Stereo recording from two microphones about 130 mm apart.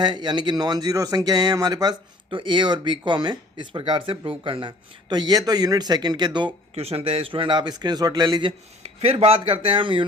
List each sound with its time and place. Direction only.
0.0 s speech: 35° right (ahead or behind)
6.7 s speech: 50° right (ahead or behind)
8.8 s speech: 50° right (ahead or behind)